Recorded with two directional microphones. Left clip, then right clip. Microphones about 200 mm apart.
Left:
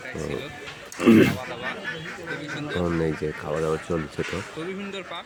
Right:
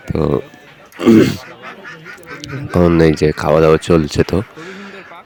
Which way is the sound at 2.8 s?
50° right (ahead or behind).